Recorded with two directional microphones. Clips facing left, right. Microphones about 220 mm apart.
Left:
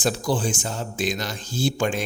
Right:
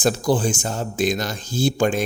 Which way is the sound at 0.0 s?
45° right (ahead or behind).